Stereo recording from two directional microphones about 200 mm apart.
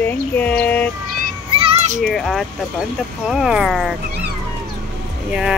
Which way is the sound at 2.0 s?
Centre (ahead or behind).